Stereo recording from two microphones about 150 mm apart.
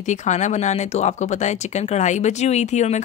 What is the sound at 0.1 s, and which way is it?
Speech, 50° left (ahead or behind).